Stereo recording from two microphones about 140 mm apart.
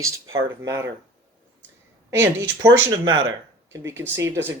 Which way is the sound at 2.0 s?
15° right (ahead or behind).